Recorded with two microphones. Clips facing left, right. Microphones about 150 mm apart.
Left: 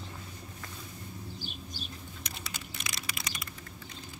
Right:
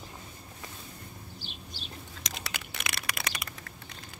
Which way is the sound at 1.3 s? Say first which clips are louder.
Left 3 dB; 45° left (ahead or behind).